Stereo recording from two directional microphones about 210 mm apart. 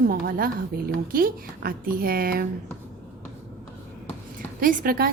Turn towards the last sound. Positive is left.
turn(degrees=-45)  # may be behind; listen again after turning